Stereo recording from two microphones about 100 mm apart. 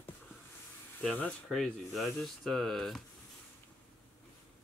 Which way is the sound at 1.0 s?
10° left (ahead or behind).